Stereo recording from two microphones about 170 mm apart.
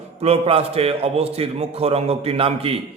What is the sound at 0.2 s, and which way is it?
A man's voice, 35° right (ahead or behind).